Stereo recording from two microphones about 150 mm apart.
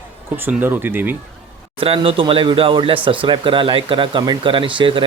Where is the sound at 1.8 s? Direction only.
35° right (ahead or behind).